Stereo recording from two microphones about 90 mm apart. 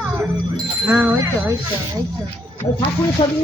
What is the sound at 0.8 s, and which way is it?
Speech, 25° right (ahead or behind).